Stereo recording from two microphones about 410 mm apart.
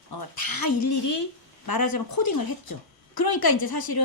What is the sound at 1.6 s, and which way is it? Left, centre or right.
A woman's voice, left.